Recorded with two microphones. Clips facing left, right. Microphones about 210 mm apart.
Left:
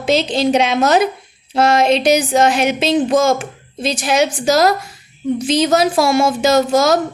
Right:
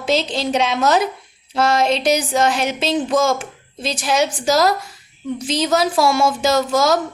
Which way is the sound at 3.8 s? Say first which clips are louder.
Left 5 dB; 15° left (ahead or behind).